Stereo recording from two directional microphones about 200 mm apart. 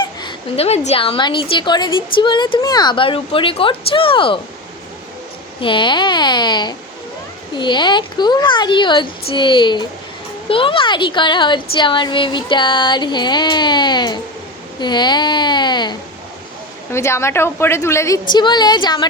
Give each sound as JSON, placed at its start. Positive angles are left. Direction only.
{"t": 0.0, "sound": "a woman's voice", "side_deg": 25}
{"t": 5.5, "sound": "a woman's voice", "side_deg": 25}